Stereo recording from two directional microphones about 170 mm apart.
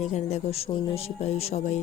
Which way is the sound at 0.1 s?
35° left (ahead or behind).